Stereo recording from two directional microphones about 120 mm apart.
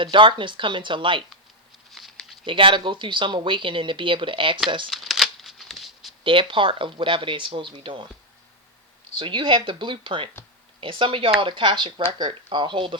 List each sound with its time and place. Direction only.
0.0 s speech: 45° right (ahead or behind)
1.9 s a sound: centre (ahead or behind)
2.4 s speech: 45° right (ahead or behind)
4.9 s a sound: centre (ahead or behind)
6.2 s speech: 45° right (ahead or behind)
9.1 s speech: 45° right (ahead or behind)